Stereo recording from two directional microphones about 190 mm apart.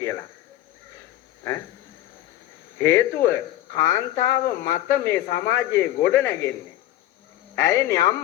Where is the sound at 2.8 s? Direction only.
15° left (ahead or behind).